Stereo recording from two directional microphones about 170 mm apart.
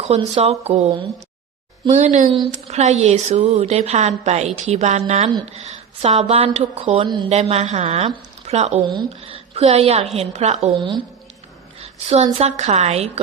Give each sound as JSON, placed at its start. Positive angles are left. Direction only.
{"t": 0.1, "sound": "a woman's voice", "side_deg": -35}
{"t": 1.9, "sound": "a woman's voice", "side_deg": -45}
{"t": 11.8, "sound": "a woman's voice", "side_deg": -40}